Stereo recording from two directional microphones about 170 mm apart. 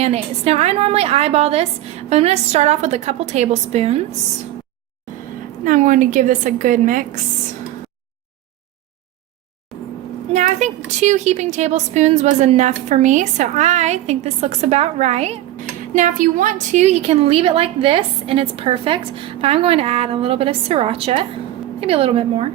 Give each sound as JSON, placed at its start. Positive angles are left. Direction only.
{"t": 0.0, "sound": "a woman's voice", "side_deg": -40}
{"t": 5.6, "sound": "a woman's voice", "side_deg": -50}
{"t": 10.3, "sound": "a woman's voice", "side_deg": -45}